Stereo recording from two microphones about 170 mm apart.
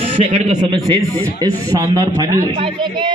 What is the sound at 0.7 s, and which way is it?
A man's voice, 25° right (ahead or behind).